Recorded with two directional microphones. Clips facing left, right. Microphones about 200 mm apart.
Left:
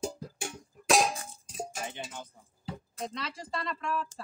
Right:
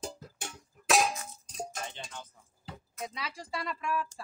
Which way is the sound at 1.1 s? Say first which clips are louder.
Left 1 dB; 30° left (ahead or behind).